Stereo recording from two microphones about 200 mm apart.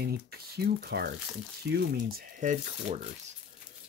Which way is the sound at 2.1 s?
40° right (ahead or behind).